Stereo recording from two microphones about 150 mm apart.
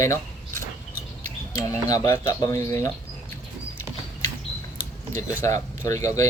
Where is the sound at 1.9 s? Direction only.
20° left (ahead or behind).